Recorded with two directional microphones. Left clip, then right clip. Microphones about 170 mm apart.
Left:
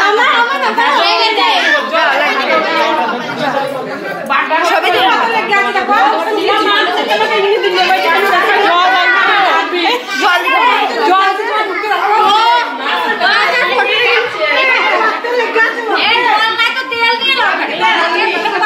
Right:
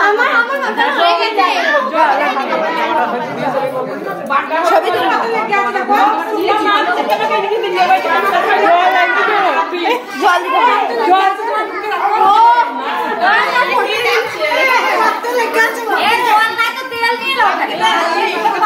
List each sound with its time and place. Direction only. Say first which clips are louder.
4.7 s chatter: even; 5° right (ahead or behind)
12.3 s chatter: right 5 dB; 90° right